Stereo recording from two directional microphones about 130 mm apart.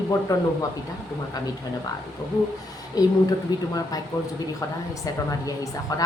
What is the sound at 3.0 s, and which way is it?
Speech, 30° left (ahead or behind).